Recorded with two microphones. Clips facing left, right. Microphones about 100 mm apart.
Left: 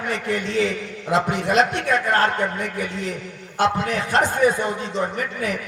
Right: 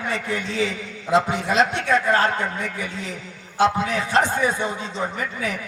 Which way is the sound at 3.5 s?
50° left (ahead or behind).